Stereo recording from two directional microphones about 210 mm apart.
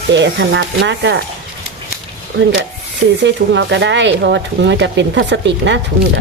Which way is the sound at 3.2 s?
55° right (ahead or behind).